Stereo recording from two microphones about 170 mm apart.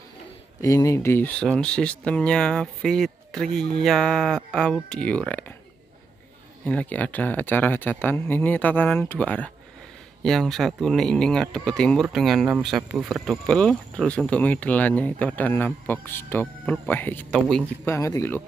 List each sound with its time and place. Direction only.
0.6 s speech: 20° left (ahead or behind)
6.6 s speech: 10° left (ahead or behind)
17.8 s speech: 15° left (ahead or behind)